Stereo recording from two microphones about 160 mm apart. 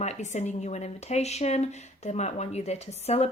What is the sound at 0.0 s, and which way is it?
Speech, 45° left (ahead or behind).